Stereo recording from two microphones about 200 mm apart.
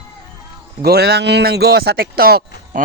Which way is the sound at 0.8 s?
55° right (ahead or behind).